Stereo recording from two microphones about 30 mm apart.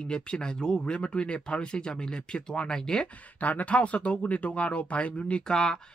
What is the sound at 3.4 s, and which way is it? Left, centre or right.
Speech, left.